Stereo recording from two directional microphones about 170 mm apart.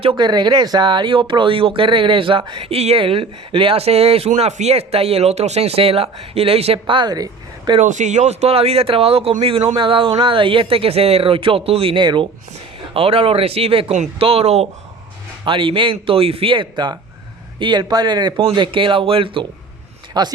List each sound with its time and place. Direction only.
0.0 s speech: 30° right (ahead or behind)
7.8 s speech: 45° right (ahead or behind); by 20.3 s 25° right (ahead or behind)